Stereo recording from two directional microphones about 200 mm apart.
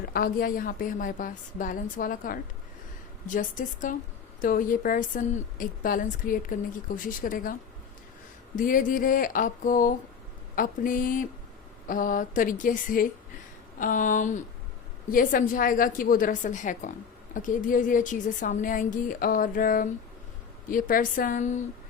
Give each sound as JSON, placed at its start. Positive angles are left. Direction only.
{"t": 0.0, "sound": "a woman's voice", "side_deg": 50}
{"t": 8.5, "sound": "a woman's voice", "side_deg": 45}